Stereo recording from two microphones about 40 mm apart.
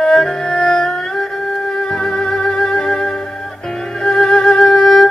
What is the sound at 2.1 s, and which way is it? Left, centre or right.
Music, centre.